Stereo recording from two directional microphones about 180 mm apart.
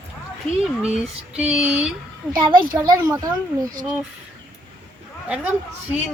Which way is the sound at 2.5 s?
25° right (ahead or behind).